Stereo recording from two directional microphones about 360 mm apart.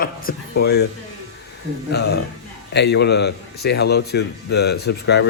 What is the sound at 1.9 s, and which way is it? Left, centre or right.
Speech, left.